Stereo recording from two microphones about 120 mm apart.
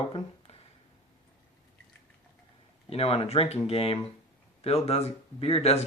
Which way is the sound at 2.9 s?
55° left (ahead or behind).